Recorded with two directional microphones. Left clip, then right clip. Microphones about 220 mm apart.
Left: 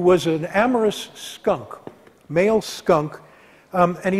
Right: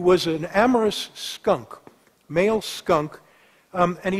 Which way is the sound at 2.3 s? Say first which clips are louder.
Left 3 dB; 15° right (ahead or behind).